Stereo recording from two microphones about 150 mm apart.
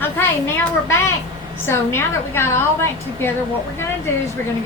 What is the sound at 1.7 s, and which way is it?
A woman's voice, 15° left (ahead or behind).